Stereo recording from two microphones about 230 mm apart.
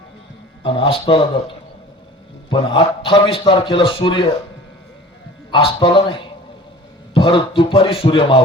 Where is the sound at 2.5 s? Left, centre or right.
Left.